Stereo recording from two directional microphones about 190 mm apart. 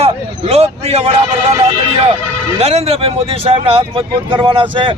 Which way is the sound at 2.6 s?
35° right (ahead or behind).